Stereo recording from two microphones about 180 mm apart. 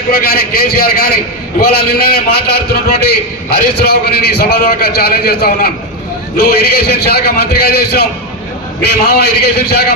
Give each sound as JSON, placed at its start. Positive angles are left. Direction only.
{"t": 0.1, "sound": "a man's voice", "side_deg": 55}